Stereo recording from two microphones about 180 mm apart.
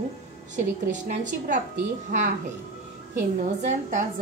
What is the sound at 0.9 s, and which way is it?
Speech, 45° right (ahead or behind).